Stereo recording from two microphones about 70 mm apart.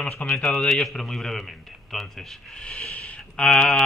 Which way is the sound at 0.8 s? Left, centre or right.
Centre.